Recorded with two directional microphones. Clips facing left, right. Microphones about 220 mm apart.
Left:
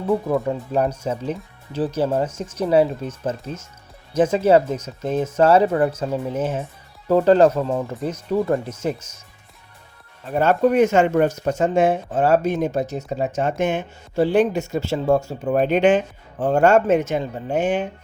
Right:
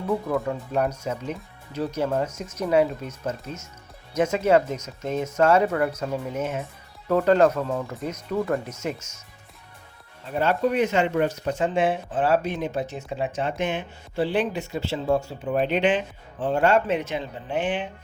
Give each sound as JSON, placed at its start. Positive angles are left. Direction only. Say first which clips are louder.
{"t": 0.4, "sound": "speech", "louder": "left 4 dB", "side_deg": 30}
{"t": 10.3, "sound": "speech", "louder": "left 6 dB", "side_deg": 50}